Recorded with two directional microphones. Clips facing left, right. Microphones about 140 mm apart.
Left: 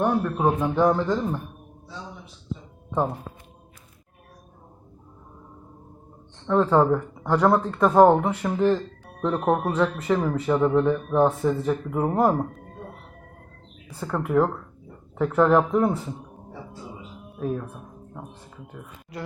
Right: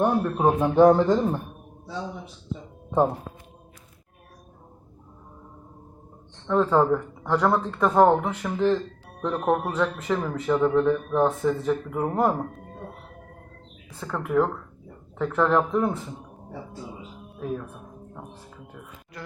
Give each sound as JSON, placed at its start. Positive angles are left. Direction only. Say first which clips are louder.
{"t": 0.0, "sound": "a man's voice", "louder": "right 1 dB", "side_deg": -15}
{"t": 0.8, "sound": "a man's voice", "louder": "right 7 dB", "side_deg": -35}
{"t": 6.5, "sound": "speech", "louder": "left 1 dB", "side_deg": 5}
{"t": 12.1, "sound": "speech", "louder": "left 2 dB", "side_deg": 0}
{"t": 14.0, "sound": "speech", "louder": "left 1 dB", "side_deg": 10}